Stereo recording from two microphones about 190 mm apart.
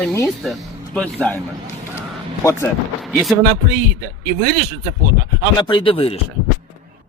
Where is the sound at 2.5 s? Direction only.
15° left (ahead or behind).